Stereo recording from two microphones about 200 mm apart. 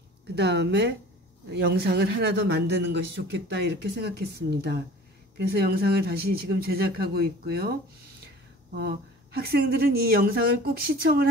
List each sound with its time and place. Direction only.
0.4 s speech: 60° right (ahead or behind)
8.7 s speech: 50° right (ahead or behind)